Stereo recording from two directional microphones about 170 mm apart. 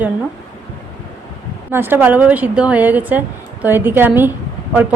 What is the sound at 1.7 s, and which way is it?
Speech, 10° right (ahead or behind).